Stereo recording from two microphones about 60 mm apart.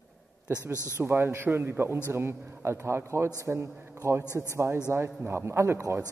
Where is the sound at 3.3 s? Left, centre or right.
Right.